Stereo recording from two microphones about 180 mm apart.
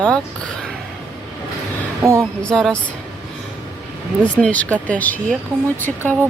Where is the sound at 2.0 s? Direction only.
15° right (ahead or behind).